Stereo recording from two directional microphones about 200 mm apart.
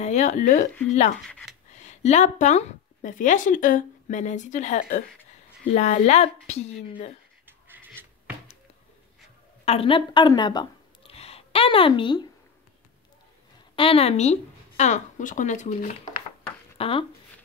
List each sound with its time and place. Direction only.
0.0 s speech: 35° left (ahead or behind)
1.2 s speech: centre (ahead or behind)
1.7 s a woman's voice: 35° left (ahead or behind)
7.4 s a sound: 10° right (ahead or behind)
9.7 s a woman's voice: 25° left (ahead or behind)
13.7 s speech: 30° left (ahead or behind)
16.7 s speech: 30° left (ahead or behind)